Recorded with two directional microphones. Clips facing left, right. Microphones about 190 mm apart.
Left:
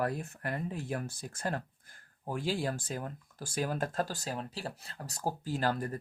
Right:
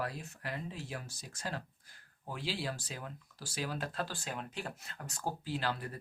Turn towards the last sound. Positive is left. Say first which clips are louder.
# left 5 dB
turn(degrees=45)  # may be behind; listen again after turning